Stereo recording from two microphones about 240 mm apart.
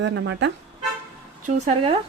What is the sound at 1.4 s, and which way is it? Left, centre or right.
Speech, right.